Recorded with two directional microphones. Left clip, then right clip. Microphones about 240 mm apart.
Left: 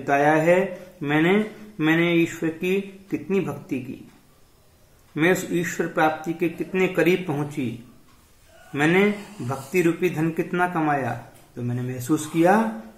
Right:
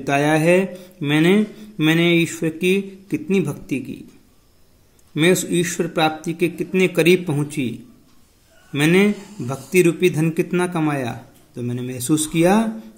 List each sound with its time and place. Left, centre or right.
0.1 s speech: right
5.1 s speech: right